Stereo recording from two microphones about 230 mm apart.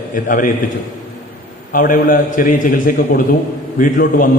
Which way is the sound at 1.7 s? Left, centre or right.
Left.